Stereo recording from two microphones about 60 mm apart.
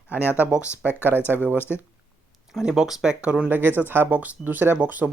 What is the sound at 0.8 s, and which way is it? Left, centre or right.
Speech, right.